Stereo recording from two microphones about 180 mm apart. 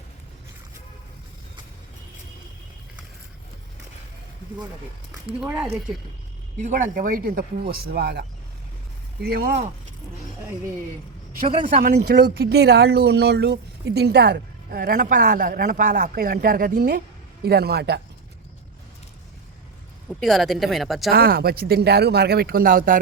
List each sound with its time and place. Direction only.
5.2 s speech: 5° right (ahead or behind)
6.6 s speech: 45° right (ahead or behind); by 8.2 s 65° right (ahead or behind)
9.2 s speech: 60° right (ahead or behind)
11.4 s speech: 25° right (ahead or behind)
11.7 s speech: 55° right (ahead or behind)
20.1 s speech: centre (ahead or behind)
21.1 s speech: 55° right (ahead or behind)